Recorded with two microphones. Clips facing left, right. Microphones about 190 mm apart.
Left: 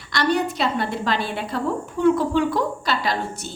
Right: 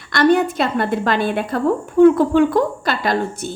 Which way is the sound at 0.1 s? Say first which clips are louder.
Right 7 dB; 55° right (ahead or behind).